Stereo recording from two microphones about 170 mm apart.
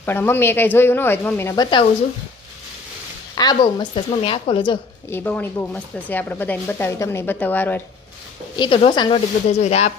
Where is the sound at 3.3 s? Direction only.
25° left (ahead or behind).